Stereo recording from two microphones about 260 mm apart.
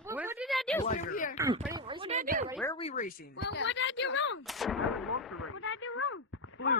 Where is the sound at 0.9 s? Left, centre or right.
Left.